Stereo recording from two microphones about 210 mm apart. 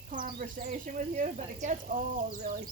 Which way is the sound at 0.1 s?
40° right (ahead or behind).